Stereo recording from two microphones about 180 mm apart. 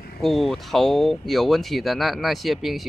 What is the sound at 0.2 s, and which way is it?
Speech, centre (ahead or behind).